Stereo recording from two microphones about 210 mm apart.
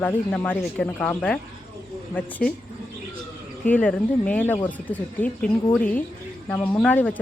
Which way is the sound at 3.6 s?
5° left (ahead or behind).